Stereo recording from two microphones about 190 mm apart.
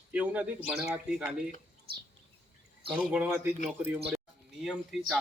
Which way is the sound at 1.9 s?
55° right (ahead or behind).